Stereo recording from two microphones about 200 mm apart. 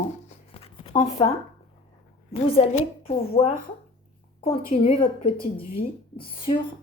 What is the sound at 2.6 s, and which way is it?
A woman's voice, 30° left (ahead or behind).